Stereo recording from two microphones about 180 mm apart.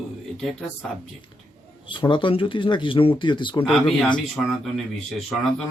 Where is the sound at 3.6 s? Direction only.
Centre (ahead or behind).